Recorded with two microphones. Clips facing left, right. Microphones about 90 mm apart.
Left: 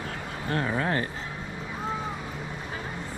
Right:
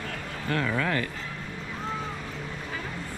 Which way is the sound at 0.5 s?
30° left (ahead or behind).